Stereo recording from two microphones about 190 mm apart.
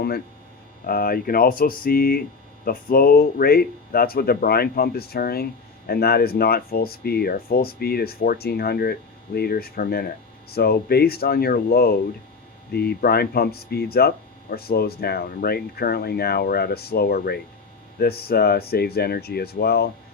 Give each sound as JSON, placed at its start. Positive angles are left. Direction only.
{"t": 0.9, "sound": "speech", "side_deg": 50}